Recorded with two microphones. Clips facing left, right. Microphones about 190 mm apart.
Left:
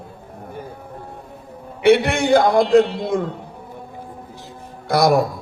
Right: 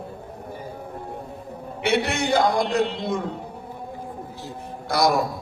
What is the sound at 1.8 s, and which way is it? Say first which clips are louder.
A man's voice: left 8 dB; 55° left (ahead or behind).